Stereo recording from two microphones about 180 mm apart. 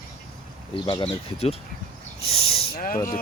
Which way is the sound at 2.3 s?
30° left (ahead or behind).